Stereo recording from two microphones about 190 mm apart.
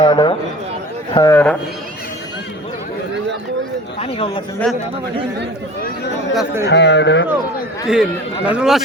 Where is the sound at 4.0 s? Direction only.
30° left (ahead or behind).